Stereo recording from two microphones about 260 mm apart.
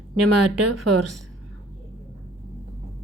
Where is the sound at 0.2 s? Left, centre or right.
Right.